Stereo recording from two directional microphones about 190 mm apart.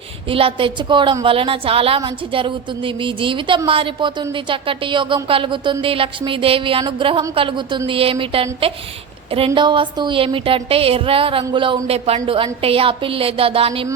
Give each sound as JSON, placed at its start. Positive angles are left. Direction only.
{"t": 0.3, "sound": "a woman's voice", "side_deg": -30}